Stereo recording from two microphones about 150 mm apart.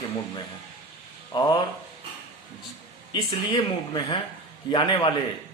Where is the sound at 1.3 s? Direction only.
30° left (ahead or behind).